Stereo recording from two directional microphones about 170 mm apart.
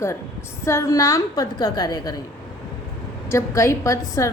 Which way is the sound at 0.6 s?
15° left (ahead or behind).